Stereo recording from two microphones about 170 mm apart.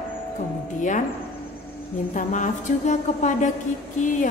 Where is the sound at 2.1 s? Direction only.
45° left (ahead or behind).